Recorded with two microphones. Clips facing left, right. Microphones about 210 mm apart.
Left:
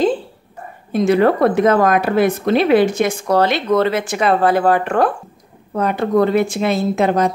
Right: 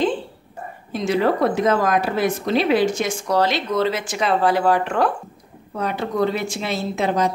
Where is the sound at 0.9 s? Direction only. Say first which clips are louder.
Left 6 dB; 55° left (ahead or behind).